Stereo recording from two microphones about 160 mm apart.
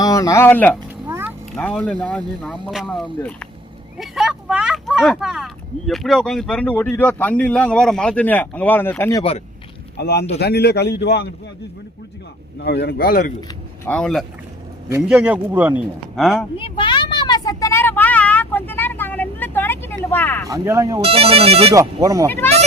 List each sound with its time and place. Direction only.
0.0 s speech: 20° left (ahead or behind)
1.0 s vehicle: 15° right (ahead or behind)
1.5 s speech: 5° left (ahead or behind)
10.0 s a man's voice: 90° left
12.5 s a man's voice: 90° left; by 13.3 s 60° left (ahead or behind)
13.8 s speech: 5° left (ahead or behind)
15.1 s speech: 10° right (ahead or behind)
16.1 s speech: centre (ahead or behind)
16.6 s vehicle: 35° left (ahead or behind); by 20.5 s 15° left (ahead or behind)
20.5 s speech: 20° right (ahead or behind)
21.0 s speech: 40° right (ahead or behind)
21.7 s speech: 20° right (ahead or behind)